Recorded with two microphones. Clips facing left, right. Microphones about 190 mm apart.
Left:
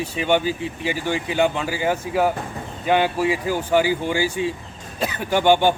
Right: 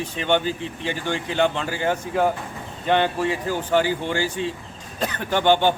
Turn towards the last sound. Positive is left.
turn(degrees=10)  # may be behind; listen again after turning